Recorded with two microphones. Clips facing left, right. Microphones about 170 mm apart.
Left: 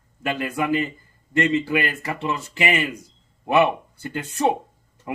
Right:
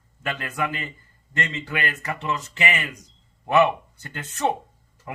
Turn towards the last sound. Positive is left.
turn(degrees=10)  # may be behind; listen again after turning